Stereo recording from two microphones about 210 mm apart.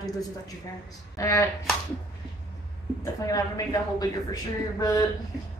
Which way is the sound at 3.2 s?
15° left (ahead or behind).